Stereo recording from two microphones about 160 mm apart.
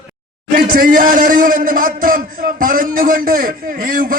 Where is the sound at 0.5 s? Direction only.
60° right (ahead or behind).